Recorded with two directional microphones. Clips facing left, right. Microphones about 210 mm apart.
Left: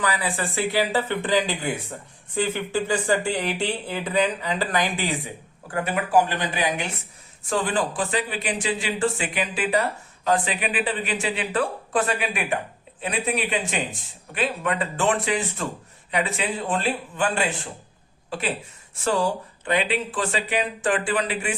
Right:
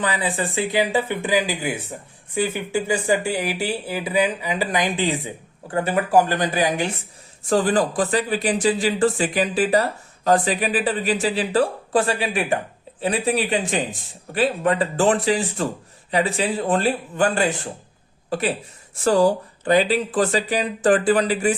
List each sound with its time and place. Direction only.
0.0 s speech: 20° right (ahead or behind)
5.7 s a man's voice: 35° right (ahead or behind)